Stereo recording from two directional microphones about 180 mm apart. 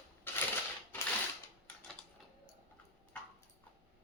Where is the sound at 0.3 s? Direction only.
10° left (ahead or behind).